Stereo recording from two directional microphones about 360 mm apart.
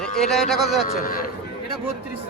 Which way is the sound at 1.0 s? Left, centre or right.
Left.